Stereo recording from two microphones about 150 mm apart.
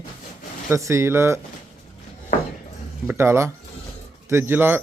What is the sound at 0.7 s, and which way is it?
Speech, 20° right (ahead or behind).